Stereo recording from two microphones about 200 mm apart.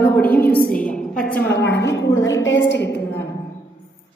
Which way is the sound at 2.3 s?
70° left (ahead or behind).